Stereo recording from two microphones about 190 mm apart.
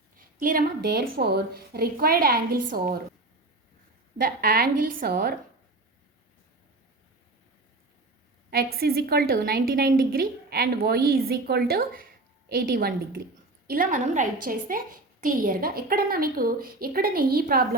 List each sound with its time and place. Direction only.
0.3 s a woman's voice: 45° right (ahead or behind)
4.2 s a woman's voice: 50° right (ahead or behind)
8.4 s a woman's voice: 55° right (ahead or behind)